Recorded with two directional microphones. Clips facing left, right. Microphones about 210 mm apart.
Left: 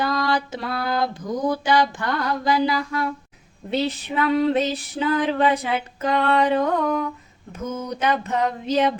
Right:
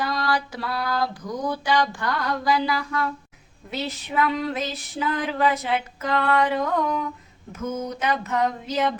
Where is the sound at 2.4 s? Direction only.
25° left (ahead or behind).